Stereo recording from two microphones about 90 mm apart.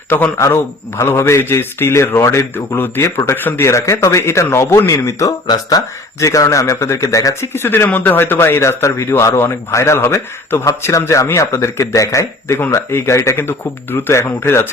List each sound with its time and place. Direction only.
0.1 s a man's voice: 25° left (ahead or behind)
7.5 s speech: 25° left (ahead or behind)